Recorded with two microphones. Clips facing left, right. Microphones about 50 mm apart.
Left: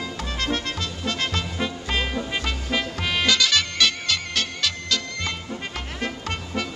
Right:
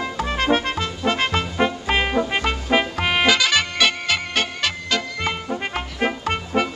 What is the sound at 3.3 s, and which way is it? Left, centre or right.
Music, centre.